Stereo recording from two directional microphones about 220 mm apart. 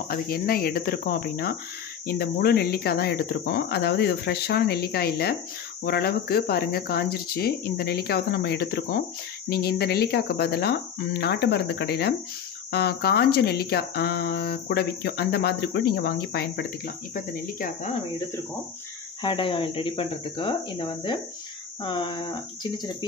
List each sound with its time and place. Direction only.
0.1 s speech: 45° left (ahead or behind)
19.2 s speech: 20° left (ahead or behind)